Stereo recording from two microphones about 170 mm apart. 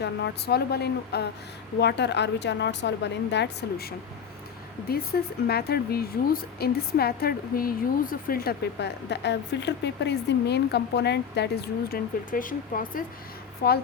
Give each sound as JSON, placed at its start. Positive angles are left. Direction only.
{"t": 0.0, "sound": "speech", "side_deg": 80}
{"t": 1.8, "sound": "speech", "side_deg": 85}
{"t": 5.1, "sound": "speech", "side_deg": 65}